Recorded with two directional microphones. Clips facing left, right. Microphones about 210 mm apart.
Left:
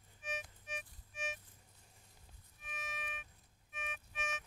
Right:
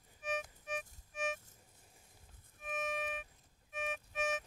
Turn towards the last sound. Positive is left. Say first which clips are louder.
# right 9 dB
turn(degrees=-35)  # may be behind; listen again after turning